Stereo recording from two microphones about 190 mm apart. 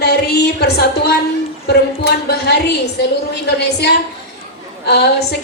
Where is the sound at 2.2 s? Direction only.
60° left (ahead or behind).